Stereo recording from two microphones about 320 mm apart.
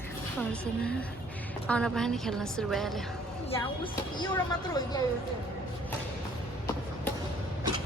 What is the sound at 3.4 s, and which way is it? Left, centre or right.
Speech, centre.